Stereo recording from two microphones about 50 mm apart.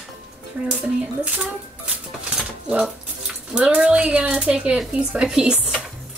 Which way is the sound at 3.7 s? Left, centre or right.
Right.